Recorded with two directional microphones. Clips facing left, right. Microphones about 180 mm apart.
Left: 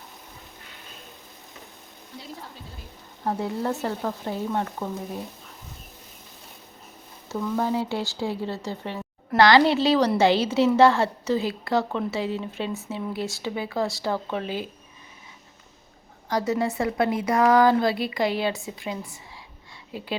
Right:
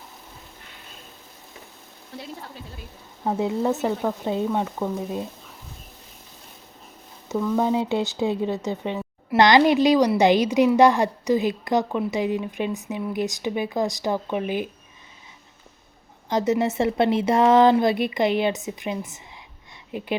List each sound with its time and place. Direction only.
3.2 s a woman's voice: 20° right (ahead or behind)
7.6 s a woman's voice: 20° right (ahead or behind)
16.3 s a woman's voice: 20° right (ahead or behind)